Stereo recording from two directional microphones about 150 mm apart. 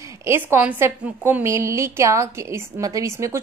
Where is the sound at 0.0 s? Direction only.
20° right (ahead or behind).